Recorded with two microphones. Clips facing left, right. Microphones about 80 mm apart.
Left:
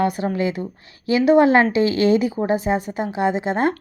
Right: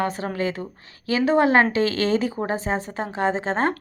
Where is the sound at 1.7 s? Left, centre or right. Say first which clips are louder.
Left 4 dB; centre.